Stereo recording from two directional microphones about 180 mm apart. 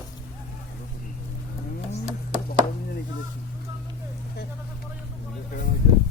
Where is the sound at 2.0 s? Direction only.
40° right (ahead or behind).